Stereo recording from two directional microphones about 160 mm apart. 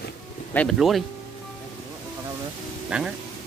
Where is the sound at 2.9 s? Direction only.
5° right (ahead or behind).